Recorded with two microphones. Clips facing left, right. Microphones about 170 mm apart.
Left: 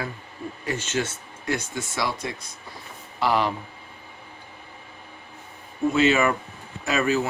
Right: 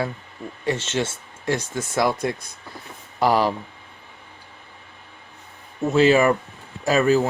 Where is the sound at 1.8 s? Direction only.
50° right (ahead or behind).